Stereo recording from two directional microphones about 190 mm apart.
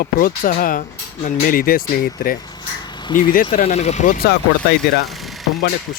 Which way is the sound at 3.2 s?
50° left (ahead or behind).